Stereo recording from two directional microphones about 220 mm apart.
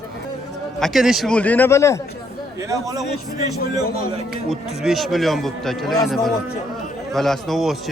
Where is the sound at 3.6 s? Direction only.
45° left (ahead or behind).